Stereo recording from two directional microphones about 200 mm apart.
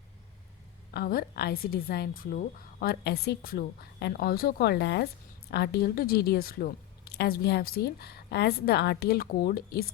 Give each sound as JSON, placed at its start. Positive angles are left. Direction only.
{"t": 0.9, "sound": "a woman's voice", "side_deg": 45}